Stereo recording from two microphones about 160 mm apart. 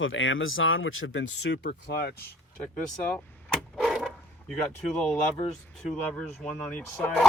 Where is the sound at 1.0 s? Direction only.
90° left.